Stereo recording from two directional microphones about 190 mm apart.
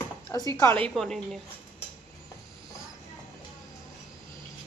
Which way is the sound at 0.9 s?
Centre (ahead or behind).